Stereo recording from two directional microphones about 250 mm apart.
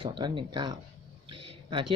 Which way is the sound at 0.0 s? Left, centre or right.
Centre.